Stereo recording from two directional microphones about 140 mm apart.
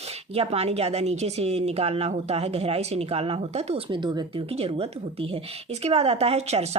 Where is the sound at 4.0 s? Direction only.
30° right (ahead or behind).